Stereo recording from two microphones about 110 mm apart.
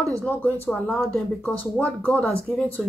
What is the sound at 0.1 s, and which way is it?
Speech, 15° left (ahead or behind).